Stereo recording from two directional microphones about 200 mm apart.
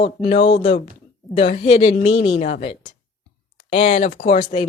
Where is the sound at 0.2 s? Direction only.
35° left (ahead or behind).